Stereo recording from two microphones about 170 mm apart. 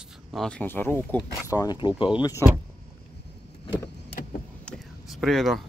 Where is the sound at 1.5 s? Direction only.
25° left (ahead or behind).